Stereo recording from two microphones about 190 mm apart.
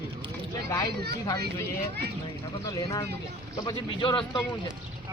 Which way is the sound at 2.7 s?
20° left (ahead or behind).